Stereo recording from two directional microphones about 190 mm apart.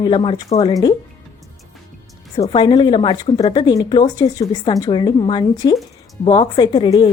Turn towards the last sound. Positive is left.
turn(degrees=25)  # may be behind; listen again after turning